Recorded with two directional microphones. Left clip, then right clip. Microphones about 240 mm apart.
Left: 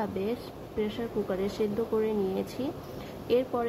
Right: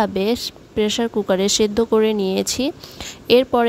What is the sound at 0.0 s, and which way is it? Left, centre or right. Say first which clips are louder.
A woman's voice: right 13 dB; right.